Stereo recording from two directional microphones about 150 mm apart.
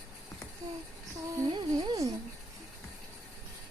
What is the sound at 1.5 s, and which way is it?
Music, 30° right (ahead or behind).